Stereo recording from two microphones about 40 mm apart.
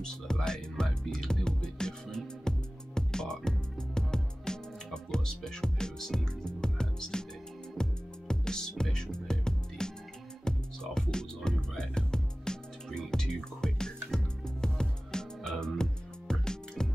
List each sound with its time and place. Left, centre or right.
0.0 s music: centre